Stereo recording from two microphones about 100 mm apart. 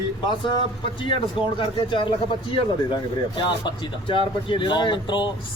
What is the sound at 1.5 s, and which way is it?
Speech, 50° left (ahead or behind).